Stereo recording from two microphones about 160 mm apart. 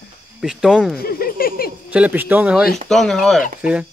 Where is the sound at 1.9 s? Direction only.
10° right (ahead or behind).